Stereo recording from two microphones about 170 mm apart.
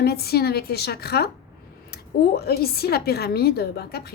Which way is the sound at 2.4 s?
65° left (ahead or behind).